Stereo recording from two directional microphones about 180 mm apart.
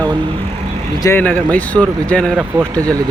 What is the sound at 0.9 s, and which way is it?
Speech, 15° left (ahead or behind).